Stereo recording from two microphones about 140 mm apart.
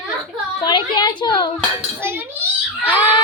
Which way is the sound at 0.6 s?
35° left (ahead or behind).